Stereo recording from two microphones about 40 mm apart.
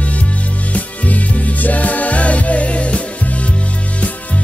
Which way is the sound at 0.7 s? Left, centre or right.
Left.